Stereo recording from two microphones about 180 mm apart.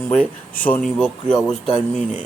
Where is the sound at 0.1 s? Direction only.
5° left (ahead or behind).